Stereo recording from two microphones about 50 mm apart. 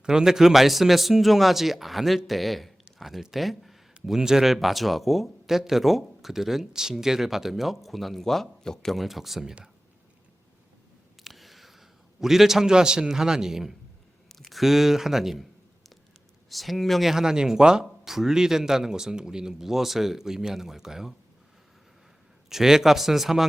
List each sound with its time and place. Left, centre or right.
0.0 s speech: centre
11.2 s a sound: centre
14.3 s speech: centre
16.5 s speech: centre
22.4 s speech: centre